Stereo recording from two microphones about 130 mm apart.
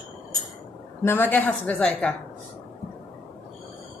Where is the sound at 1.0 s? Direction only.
15° left (ahead or behind).